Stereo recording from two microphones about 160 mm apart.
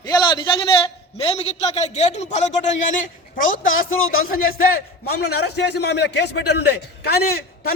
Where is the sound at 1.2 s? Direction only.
40° left (ahead or behind); by 3.6 s 55° left (ahead or behind).